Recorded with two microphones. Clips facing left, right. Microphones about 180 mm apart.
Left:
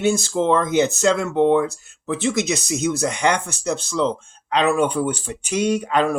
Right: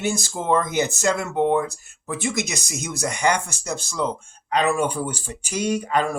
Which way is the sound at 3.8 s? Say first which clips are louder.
Left 2 dB; 10° right (ahead or behind).